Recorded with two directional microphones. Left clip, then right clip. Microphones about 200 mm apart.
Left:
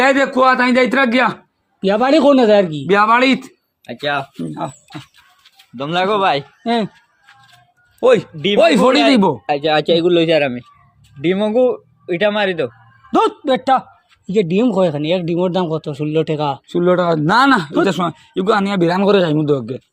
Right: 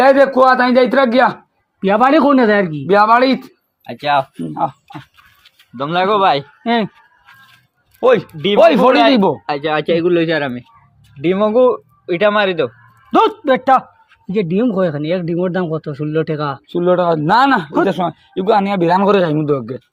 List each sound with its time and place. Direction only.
0.0 s a man's voice: 20° left (ahead or behind)
1.8 s a man's voice: 5° right (ahead or behind)
2.8 s a man's voice: 15° left (ahead or behind)
3.9 s speech: 20° right (ahead or behind)
5.7 s speech: 5° right (ahead or behind)
6.6 s speech: centre (ahead or behind)
7.9 s a man's voice: 10° left (ahead or behind)
8.6 s a man's voice: 25° left (ahead or behind)
9.5 s a man's voice: 5° left (ahead or behind)
16.6 s a man's voice: 25° left (ahead or behind)
19.0 s speech: 10° left (ahead or behind)